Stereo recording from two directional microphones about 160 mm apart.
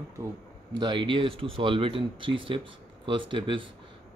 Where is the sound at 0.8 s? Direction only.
30° right (ahead or behind).